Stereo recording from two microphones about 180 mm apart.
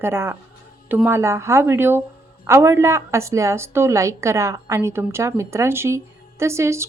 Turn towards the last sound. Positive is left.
turn(degrees=-15)  # may be behind; listen again after turning